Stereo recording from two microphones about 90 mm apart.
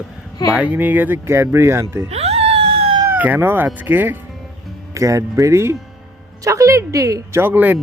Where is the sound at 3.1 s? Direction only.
20° right (ahead or behind).